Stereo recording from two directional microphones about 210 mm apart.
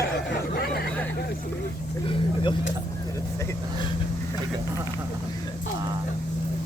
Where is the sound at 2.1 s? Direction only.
25° left (ahead or behind).